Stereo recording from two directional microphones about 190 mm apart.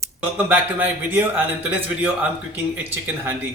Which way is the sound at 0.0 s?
10° right (ahead or behind).